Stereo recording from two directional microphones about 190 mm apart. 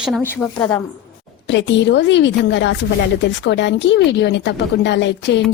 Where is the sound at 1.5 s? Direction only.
70° left (ahead or behind).